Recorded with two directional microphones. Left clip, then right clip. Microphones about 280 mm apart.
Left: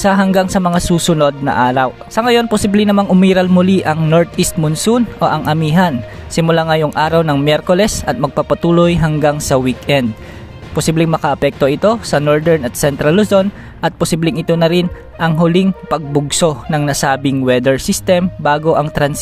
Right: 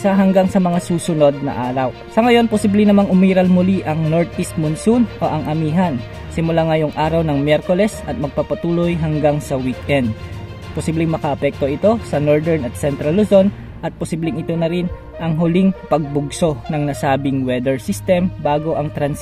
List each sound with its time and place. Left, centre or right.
0.0 s speech: left